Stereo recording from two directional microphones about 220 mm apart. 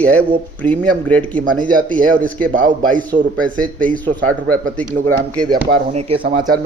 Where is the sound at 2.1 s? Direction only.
5° left (ahead or behind).